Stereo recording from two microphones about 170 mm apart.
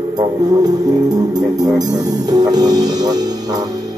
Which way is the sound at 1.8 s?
20° right (ahead or behind).